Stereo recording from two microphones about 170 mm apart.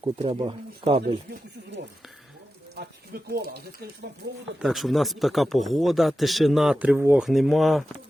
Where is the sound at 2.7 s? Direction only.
70° right (ahead or behind).